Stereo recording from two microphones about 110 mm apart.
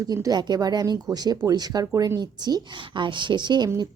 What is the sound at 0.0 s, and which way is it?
A woman's voice, 35° right (ahead or behind).